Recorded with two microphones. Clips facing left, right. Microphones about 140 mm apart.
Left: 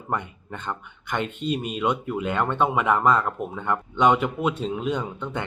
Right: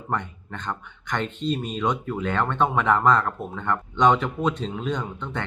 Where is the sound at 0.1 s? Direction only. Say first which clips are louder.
Even; 10° left (ahead or behind).